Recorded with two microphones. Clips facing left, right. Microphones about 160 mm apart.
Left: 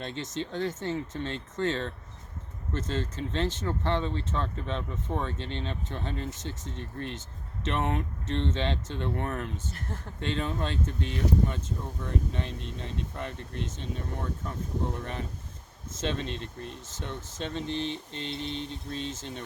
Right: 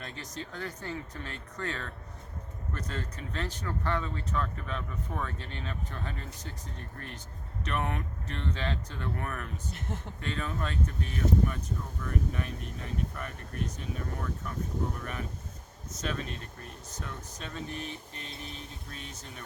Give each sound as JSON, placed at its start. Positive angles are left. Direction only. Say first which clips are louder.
{"t": 0.0, "sound": "speech", "louder": "left 7 dB", "side_deg": 25}